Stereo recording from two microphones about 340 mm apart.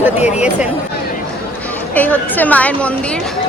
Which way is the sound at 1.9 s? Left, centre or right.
Centre.